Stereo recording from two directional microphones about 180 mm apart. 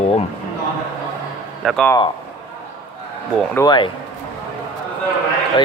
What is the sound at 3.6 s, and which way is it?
Speech, 25° left (ahead or behind).